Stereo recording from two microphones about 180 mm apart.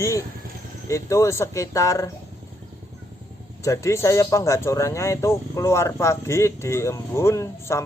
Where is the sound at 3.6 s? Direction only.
15° left (ahead or behind).